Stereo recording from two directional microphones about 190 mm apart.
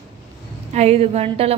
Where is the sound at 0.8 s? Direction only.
35° right (ahead or behind).